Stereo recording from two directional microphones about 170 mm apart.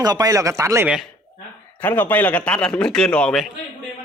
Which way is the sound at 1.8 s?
10° left (ahead or behind).